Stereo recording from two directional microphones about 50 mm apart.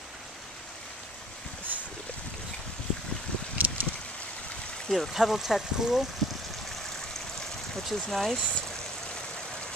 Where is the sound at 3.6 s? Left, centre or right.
Right.